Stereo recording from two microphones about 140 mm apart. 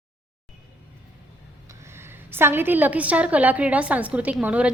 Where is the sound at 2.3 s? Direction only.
15° right (ahead or behind).